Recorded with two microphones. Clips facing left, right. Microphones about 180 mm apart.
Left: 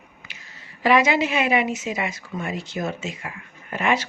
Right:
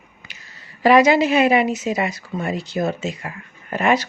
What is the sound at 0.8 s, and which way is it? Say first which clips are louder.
Speech: right 5 dB; 40° right (ahead or behind).